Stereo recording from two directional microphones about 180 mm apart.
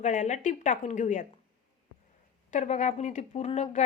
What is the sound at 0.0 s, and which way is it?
Speech, 40° left (ahead or behind).